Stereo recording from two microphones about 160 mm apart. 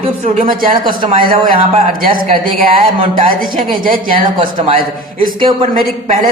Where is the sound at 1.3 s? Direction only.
60° right (ahead or behind).